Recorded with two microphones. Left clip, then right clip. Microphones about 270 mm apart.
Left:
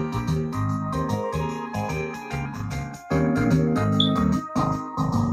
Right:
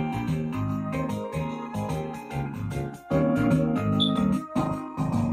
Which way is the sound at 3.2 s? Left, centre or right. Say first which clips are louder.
Left 1 dB; centre.